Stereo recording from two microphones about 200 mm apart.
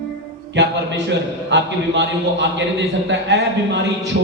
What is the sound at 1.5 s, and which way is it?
A man's voice, 65° right (ahead or behind).